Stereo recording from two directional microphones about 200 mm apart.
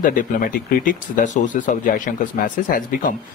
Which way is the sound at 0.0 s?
45° left (ahead or behind).